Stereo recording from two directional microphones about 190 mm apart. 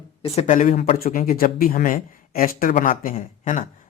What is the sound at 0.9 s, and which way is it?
Speech, 50° left (ahead or behind).